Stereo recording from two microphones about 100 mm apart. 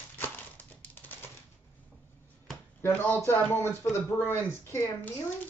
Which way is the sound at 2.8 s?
20° left (ahead or behind).